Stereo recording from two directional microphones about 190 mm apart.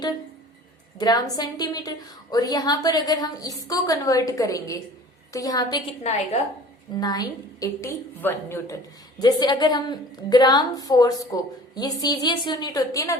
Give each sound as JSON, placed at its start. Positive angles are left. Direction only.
{"t": 0.9, "sound": "a woman's voice", "side_deg": 20}
{"t": 6.9, "sound": "a woman's voice", "side_deg": 20}